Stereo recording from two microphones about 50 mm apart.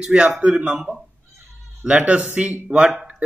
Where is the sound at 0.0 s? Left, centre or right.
Centre.